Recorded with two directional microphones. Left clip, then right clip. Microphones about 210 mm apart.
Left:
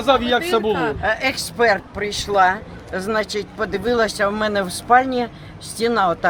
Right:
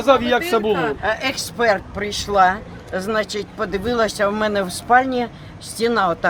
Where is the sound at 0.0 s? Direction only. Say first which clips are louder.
Right 1 dB; 25° right (ahead or behind).